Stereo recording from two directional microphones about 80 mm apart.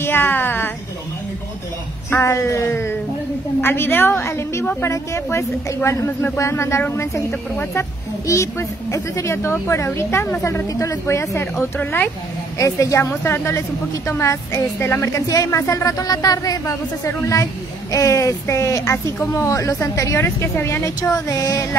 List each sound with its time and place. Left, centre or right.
0.0 s a sound: left
2.2 s a woman's voice: left
12.5 s a woman's voice: left
15.2 s a woman's voice: left